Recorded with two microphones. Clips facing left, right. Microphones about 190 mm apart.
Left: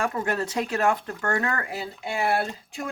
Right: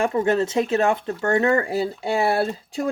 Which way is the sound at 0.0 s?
25° right (ahead or behind).